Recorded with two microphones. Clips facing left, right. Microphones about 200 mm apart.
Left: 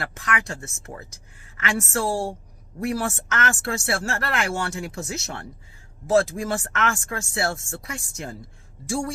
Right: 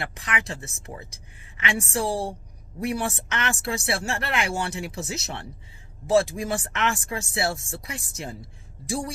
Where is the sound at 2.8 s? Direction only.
15° right (ahead or behind).